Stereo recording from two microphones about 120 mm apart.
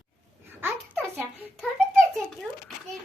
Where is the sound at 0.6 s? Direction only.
10° right (ahead or behind).